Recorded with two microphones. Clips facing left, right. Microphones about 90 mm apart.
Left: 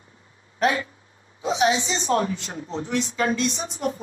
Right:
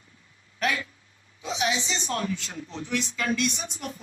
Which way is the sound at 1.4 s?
35° left (ahead or behind).